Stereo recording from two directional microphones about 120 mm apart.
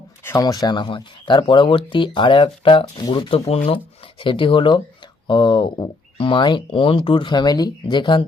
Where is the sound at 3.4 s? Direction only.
60° left (ahead or behind).